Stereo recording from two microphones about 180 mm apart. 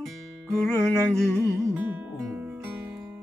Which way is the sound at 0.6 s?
5° left (ahead or behind).